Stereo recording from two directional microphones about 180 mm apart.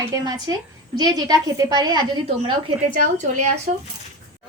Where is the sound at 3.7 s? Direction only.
45° right (ahead or behind).